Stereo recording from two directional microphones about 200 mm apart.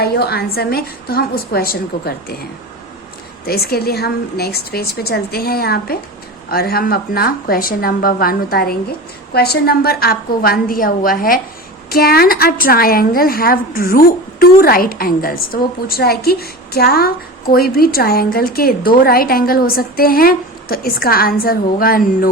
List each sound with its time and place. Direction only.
0.0 s a woman's voice: 55° left (ahead or behind)